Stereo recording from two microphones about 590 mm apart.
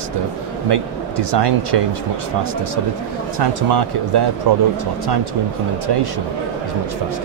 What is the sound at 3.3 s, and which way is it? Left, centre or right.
Speech, right.